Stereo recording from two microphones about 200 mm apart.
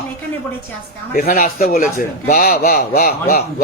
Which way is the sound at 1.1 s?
45° left (ahead or behind).